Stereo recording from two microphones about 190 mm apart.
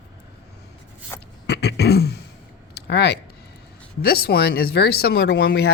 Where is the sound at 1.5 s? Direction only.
60° left (ahead or behind).